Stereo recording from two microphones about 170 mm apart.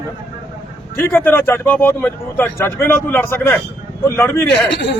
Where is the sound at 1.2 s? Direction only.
15° left (ahead or behind).